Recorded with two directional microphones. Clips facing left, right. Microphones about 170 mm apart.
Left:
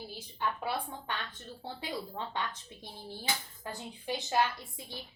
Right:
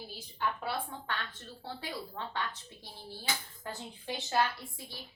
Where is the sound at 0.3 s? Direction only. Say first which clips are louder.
Left 1 dB; 15° left (ahead or behind).